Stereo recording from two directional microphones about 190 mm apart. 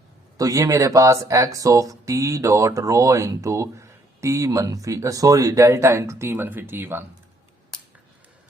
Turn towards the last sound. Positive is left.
turn(degrees=-10)  # may be behind; listen again after turning